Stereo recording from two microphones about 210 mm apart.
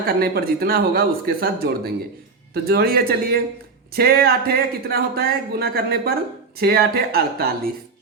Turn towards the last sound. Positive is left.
turn(degrees=-45)  # may be behind; listen again after turning